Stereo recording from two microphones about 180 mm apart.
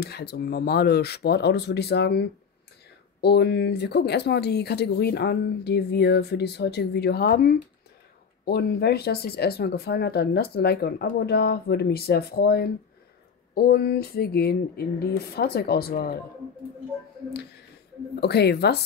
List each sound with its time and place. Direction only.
0.0 s speech: 65° left (ahead or behind)
17.3 s speech: 65° left (ahead or behind)